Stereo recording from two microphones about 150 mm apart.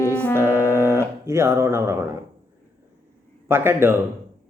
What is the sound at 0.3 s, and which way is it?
Music, 15° right (ahead or behind).